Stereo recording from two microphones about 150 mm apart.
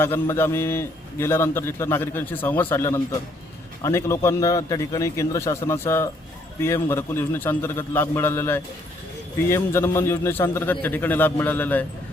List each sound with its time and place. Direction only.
0.0 s a man's voice: 15° left (ahead or behind)